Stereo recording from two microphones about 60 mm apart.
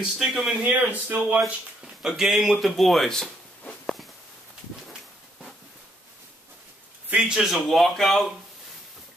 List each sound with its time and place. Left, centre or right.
0.0 s a man's voice: centre
0.7 s a man's voice: right
2.0 s speech: centre
7.2 s a man's voice: centre
7.6 s speech: centre